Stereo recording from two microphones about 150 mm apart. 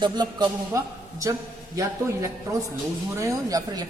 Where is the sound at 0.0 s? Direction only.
30° right (ahead or behind).